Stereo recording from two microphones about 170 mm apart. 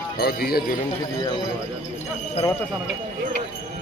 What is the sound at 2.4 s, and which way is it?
Speech, 40° left (ahead or behind).